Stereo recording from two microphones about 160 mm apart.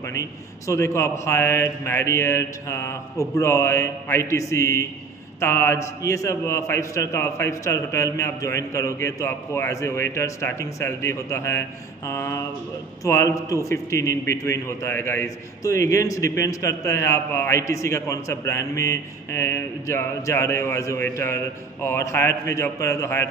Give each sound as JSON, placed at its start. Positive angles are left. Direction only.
{"t": 0.0, "sound": "a man's voice", "side_deg": 20}